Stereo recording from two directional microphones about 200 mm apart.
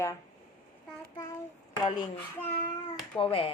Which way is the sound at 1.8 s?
20° left (ahead or behind).